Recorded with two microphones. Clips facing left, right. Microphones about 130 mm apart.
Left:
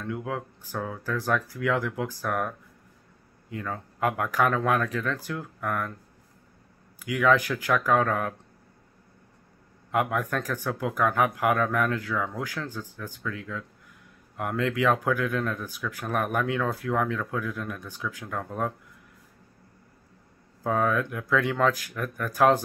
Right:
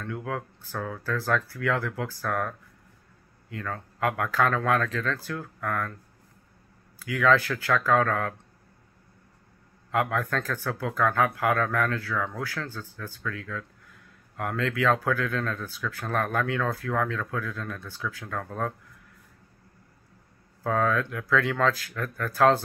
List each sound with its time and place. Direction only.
0.0 s speech: 20° left (ahead or behind)
7.0 s speech: 15° left (ahead or behind)
9.8 s speech: 15° left (ahead or behind)
20.6 s speech: 15° left (ahead or behind)